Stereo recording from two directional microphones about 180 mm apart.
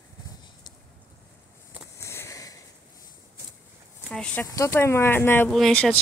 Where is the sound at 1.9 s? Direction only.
15° left (ahead or behind).